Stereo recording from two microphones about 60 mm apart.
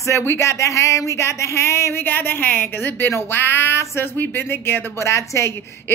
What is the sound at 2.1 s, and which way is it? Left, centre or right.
Speech, left.